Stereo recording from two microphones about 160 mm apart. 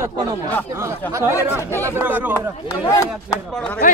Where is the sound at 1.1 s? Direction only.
15° right (ahead or behind).